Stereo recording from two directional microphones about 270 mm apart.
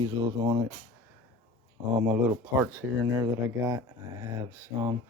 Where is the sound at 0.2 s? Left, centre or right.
Centre.